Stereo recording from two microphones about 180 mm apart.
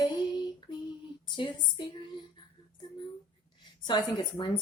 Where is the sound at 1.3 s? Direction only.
25° left (ahead or behind).